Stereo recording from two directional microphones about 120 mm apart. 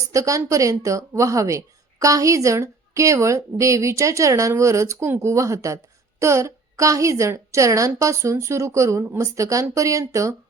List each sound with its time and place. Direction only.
0.1 s speech: 25° right (ahead or behind)